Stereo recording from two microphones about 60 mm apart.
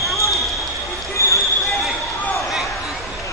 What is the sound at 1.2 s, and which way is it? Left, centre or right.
Basketball bounce, left.